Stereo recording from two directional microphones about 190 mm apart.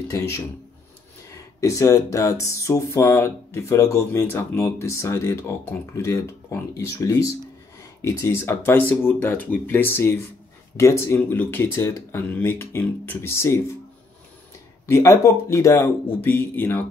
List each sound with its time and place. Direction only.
0.1 s speech: 15° left (ahead or behind)
14.9 s speech: 15° left (ahead or behind)